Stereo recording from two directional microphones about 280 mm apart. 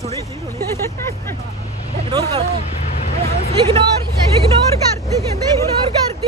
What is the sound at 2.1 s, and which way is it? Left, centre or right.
Speech, centre.